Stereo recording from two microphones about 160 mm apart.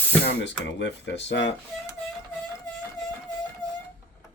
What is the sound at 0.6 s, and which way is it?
Speech, 90° left.